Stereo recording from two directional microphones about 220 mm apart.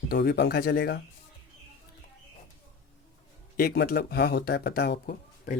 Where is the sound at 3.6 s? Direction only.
45° left (ahead or behind).